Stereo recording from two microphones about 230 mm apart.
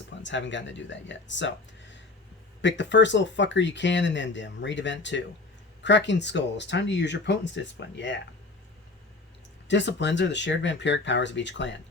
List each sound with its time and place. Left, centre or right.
0.2 s speech: left
9.6 s speech: left